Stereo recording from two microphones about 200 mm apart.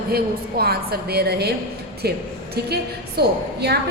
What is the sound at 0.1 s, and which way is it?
A woman's voice, 50° right (ahead or behind).